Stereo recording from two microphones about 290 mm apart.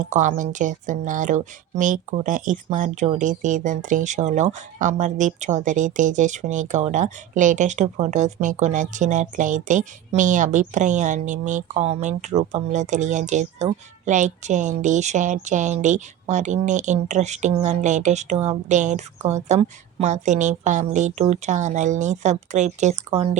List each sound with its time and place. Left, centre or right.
0.0 s speech: right